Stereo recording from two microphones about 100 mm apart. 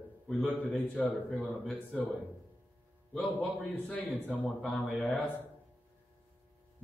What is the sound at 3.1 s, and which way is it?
Speech, 5° left (ahead or behind).